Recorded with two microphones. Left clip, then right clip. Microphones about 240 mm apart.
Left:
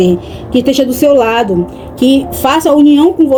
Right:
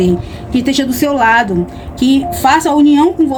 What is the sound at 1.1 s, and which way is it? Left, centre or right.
Speech, right.